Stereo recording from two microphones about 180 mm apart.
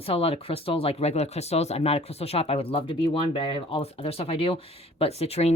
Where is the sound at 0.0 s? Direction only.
30° left (ahead or behind).